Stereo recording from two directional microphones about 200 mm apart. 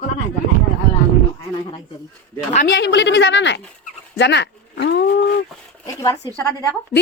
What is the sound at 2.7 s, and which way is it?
A woman's voice, 65° left (ahead or behind).